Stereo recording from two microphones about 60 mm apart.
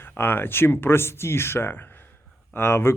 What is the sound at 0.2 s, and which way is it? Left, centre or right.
Speech, left.